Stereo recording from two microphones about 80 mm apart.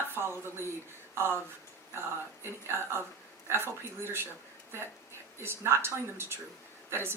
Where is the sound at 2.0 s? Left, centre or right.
Right.